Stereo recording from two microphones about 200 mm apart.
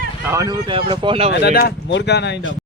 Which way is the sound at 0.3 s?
15° right (ahead or behind).